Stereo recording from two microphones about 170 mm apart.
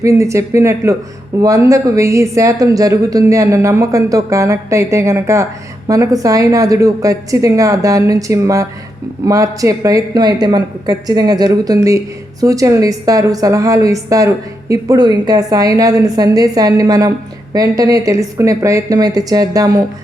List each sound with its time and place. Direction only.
0.0 s a woman's voice: 15° right (ahead or behind)